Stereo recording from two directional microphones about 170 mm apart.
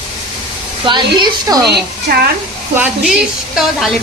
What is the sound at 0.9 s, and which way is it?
Speech, 25° right (ahead or behind).